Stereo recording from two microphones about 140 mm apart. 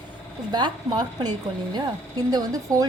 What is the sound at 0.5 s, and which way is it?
A woman's voice, 30° right (ahead or behind).